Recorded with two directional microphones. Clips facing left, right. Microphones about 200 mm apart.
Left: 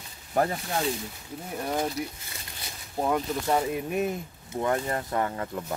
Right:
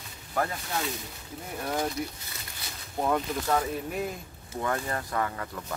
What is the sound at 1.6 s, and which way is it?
Speech, 15° left (ahead or behind).